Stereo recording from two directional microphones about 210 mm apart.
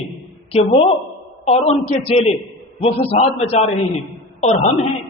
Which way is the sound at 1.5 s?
30° left (ahead or behind).